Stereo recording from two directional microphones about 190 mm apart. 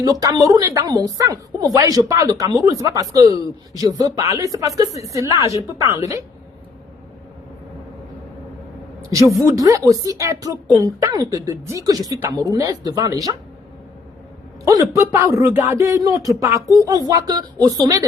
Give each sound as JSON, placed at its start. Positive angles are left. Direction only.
{"t": 0.0, "sound": "a woman's voice", "side_deg": -20}
{"t": 9.1, "sound": "a man's voice", "side_deg": -15}
{"t": 14.7, "sound": "a man's voice", "side_deg": -15}